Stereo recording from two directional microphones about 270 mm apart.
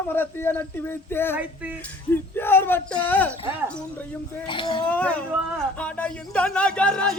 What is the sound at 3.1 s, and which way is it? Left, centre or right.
Music, centre.